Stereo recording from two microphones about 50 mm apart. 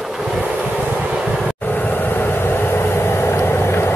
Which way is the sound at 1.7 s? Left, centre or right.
Left.